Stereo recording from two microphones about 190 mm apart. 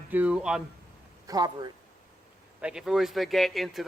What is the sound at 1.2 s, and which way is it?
Speech, 20° right (ahead or behind).